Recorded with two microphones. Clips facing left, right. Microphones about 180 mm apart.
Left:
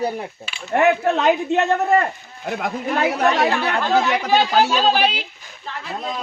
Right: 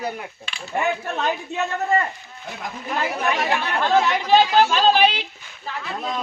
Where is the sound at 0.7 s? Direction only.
70° left (ahead or behind).